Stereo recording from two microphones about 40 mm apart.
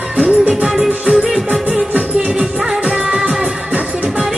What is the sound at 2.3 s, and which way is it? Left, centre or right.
Music, centre.